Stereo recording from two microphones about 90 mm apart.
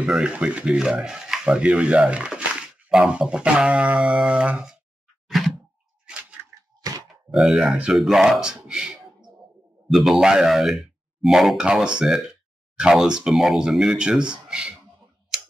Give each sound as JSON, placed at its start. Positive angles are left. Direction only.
{"t": 0.0, "sound": "speech", "side_deg": -10}
{"t": 5.3, "sound": "a sound", "side_deg": 0}
{"t": 6.1, "sound": "crack", "side_deg": -10}
{"t": 6.7, "sound": "grunt", "side_deg": -55}
{"t": 7.3, "sound": "speech", "side_deg": 0}
{"t": 7.7, "sound": "speech", "side_deg": -10}